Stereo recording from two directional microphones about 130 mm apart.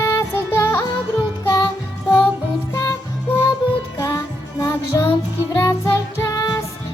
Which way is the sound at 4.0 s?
30° left (ahead or behind).